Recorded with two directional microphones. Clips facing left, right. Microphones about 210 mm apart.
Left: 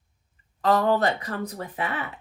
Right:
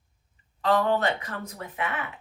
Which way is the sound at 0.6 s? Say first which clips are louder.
Left 2 dB; 40° left (ahead or behind).